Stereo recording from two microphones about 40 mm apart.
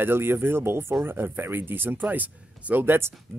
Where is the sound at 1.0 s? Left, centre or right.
Right.